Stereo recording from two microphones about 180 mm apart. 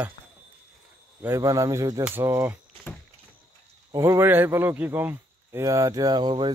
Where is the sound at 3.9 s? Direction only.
15° right (ahead or behind).